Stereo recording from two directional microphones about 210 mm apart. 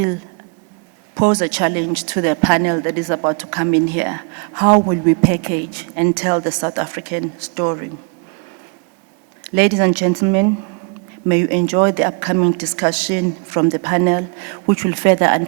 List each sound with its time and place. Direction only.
1.1 s a woman's voice: 10° right (ahead or behind)
9.4 s a woman's voice: 10° right (ahead or behind)